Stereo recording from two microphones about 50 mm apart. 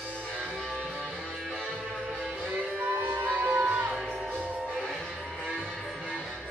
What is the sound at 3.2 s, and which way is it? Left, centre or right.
Music, right.